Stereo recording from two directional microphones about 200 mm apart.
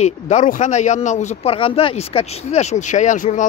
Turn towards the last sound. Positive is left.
turn(degrees=40)  # may be behind; listen again after turning